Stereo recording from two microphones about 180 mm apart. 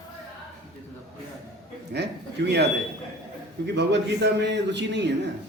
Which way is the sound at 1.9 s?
70° right (ahead or behind).